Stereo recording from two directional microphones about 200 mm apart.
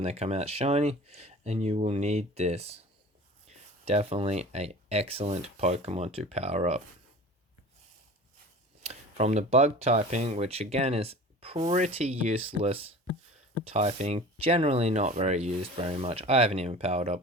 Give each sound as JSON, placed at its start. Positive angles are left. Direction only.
{"t": 0.0, "sound": "speech", "side_deg": -30}
{"t": 3.8, "sound": "speech", "side_deg": -30}
{"t": 8.8, "sound": "speech", "side_deg": -35}